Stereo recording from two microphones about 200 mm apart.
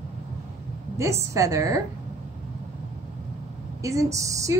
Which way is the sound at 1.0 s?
15° right (ahead or behind).